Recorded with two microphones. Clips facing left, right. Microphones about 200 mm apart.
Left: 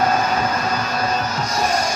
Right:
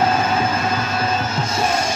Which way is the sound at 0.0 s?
25° right (ahead or behind).